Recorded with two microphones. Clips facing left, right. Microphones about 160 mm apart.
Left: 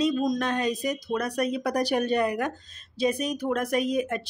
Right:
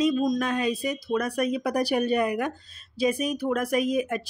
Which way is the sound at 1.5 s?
10° right (ahead or behind).